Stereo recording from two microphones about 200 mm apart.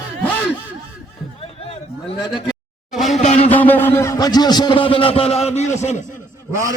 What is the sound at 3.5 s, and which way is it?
A man's voice, 10° left (ahead or behind).